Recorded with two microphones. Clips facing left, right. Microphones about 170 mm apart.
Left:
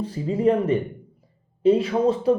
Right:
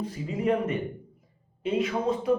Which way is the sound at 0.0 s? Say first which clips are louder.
Left 7 dB; 30° left (ahead or behind).